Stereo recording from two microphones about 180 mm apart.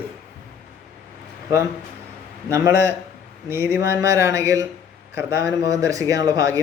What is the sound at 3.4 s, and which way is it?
Speech, 15° right (ahead or behind).